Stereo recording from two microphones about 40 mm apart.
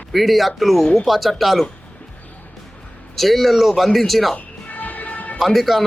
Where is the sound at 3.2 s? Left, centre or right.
Centre.